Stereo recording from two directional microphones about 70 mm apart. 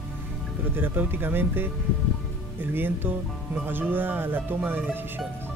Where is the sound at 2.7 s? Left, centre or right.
Right.